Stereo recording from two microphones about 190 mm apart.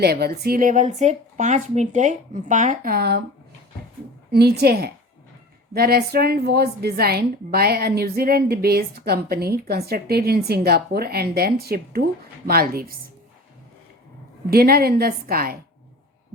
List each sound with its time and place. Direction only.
0.0 s speech: 55° right (ahead or behind)
4.3 s a woman's voice: 55° right (ahead or behind)
14.5 s a woman's voice: 50° right (ahead or behind)